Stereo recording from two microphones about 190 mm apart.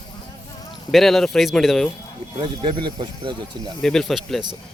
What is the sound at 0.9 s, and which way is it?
Speech, centre (ahead or behind).